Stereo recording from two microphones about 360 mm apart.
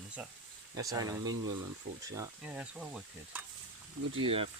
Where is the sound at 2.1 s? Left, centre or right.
Centre.